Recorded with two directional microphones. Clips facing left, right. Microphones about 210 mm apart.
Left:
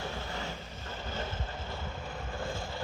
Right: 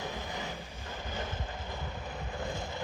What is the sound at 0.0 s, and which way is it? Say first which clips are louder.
Vehicle: even; 15° right (ahead or behind).